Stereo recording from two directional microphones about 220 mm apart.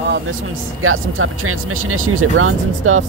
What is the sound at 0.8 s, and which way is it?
Speech, 70° right (ahead or behind).